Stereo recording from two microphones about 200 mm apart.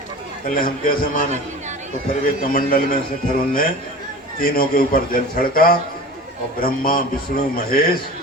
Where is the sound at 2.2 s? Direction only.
45° left (ahead or behind).